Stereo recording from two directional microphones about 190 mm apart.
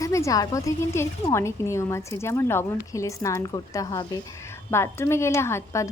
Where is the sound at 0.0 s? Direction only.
15° left (ahead or behind).